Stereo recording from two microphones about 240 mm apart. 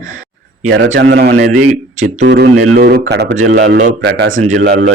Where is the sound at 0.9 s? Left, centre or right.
Right.